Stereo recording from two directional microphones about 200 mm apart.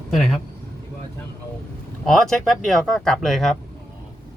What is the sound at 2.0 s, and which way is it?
Speech, centre (ahead or behind).